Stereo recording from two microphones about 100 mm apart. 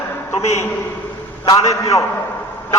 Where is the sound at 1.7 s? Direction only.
35° left (ahead or behind).